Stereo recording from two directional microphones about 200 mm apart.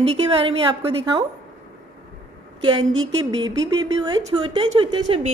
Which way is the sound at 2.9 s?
70° right (ahead or behind).